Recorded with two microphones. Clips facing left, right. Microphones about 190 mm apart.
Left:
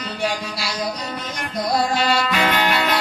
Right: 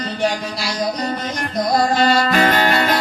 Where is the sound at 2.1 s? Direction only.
40° right (ahead or behind).